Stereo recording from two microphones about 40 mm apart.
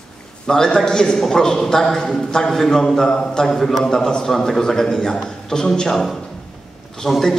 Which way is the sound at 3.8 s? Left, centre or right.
Centre.